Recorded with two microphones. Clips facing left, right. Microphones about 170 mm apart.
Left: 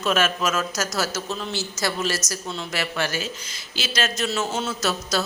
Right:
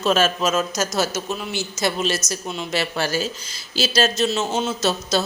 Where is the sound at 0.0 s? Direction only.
30° right (ahead or behind).